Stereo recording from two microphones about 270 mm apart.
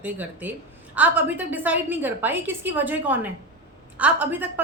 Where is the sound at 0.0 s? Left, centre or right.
Centre.